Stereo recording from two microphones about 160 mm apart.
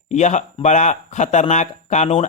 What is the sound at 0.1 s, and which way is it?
A man's voice, 50° left (ahead or behind).